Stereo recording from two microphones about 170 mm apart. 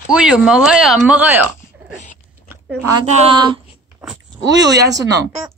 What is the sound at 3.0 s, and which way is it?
Speech, 35° right (ahead or behind).